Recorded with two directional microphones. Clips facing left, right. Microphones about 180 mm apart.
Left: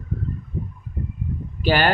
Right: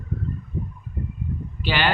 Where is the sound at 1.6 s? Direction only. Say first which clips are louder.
Left 4 dB; 45° left (ahead or behind).